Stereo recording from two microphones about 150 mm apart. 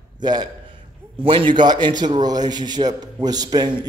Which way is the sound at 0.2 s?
30° right (ahead or behind).